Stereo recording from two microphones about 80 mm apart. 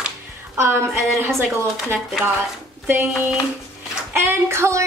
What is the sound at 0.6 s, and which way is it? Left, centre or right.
Speech, right.